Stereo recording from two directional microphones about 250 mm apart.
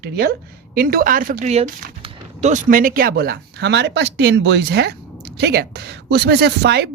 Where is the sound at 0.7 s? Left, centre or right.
Right.